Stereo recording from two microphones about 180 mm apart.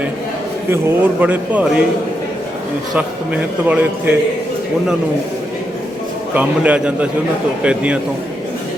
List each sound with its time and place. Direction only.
0.7 s a man's voice: 10° right (ahead or behind)
3.7 s a man's voice: 10° right (ahead or behind)
6.3 s a man's voice: 10° right (ahead or behind)